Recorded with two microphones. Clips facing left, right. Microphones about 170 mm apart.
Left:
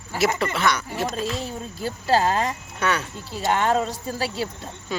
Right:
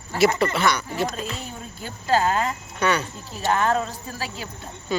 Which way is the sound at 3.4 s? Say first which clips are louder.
Left 1 dB; 25° left (ahead or behind).